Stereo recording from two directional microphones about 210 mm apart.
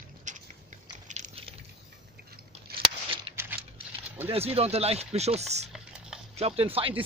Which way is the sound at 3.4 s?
10° right (ahead or behind).